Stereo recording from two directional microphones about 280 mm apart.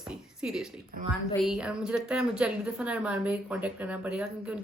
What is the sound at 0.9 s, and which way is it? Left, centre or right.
Speech, right.